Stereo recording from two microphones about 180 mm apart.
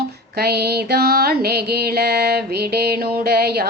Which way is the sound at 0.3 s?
60° right (ahead or behind).